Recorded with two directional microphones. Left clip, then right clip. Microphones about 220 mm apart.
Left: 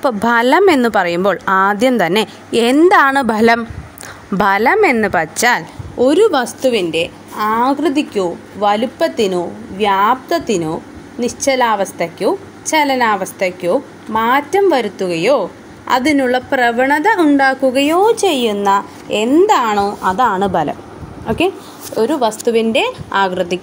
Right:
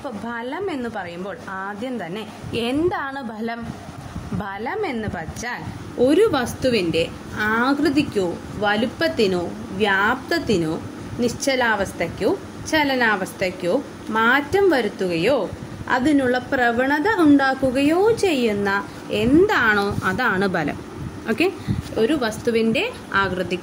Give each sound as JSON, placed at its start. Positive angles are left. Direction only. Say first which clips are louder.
{"t": 0.0, "sound": "speech", "louder": "left 16 dB", "side_deg": 50}
{"t": 5.9, "sound": "a woman's voice", "louder": "left 6 dB", "side_deg": 30}
{"t": 20.3, "sound": "a woman's voice", "louder": "left 7 dB", "side_deg": 5}
{"t": 22.0, "sound": "a woman's voice", "louder": "left 6 dB", "side_deg": 20}